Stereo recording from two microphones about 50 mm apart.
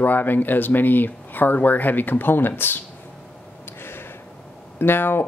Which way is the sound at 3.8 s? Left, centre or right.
Left.